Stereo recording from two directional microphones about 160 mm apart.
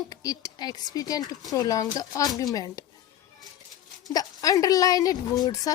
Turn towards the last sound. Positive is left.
turn(degrees=20)  # may be behind; listen again after turning